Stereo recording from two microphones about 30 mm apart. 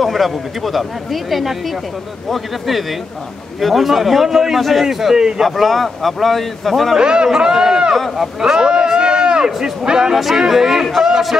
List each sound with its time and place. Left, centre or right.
0.0 s a man's voice: centre
4.6 s speech: centre
4.8 s a man's voice: centre
5.4 s speech: centre
7.0 s speech: right
8.4 s a sound: right
9.8 s speech: right